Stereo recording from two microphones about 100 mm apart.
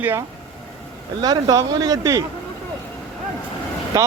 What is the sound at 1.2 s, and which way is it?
Speech, 40° right (ahead or behind).